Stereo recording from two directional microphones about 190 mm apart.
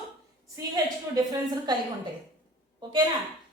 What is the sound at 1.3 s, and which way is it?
Speech, 20° right (ahead or behind).